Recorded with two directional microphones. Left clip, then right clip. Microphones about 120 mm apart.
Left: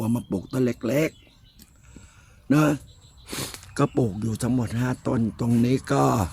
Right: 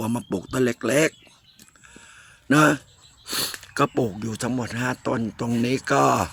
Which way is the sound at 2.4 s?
20° right (ahead or behind).